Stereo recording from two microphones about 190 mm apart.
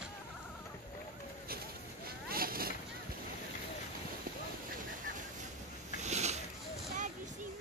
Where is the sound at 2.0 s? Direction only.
50° right (ahead or behind).